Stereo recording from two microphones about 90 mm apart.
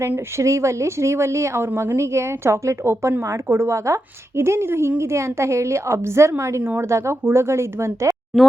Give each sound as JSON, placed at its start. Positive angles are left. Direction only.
{"t": 0.3, "sound": "speech", "side_deg": -35}
{"t": 8.3, "sound": "speech", "side_deg": 0}